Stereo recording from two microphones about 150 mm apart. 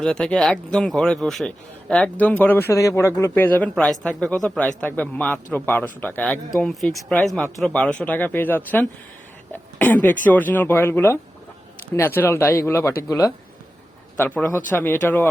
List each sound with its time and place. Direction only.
0.0 s a man's voice: 5° left (ahead or behind); by 13.3 s 20° left (ahead or behind)
14.2 s a man's voice: 10° left (ahead or behind)